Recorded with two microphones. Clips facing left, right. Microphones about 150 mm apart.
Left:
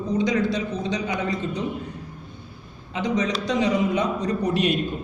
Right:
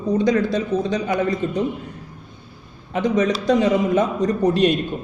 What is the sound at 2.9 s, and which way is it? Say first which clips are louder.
Speech: right 5 dB; 50° right (ahead or behind).